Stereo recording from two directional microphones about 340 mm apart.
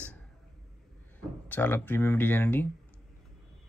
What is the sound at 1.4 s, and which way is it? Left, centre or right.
Speech, centre.